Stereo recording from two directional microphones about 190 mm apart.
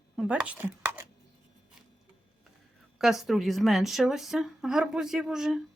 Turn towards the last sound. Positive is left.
turn(degrees=-5)  # may be behind; listen again after turning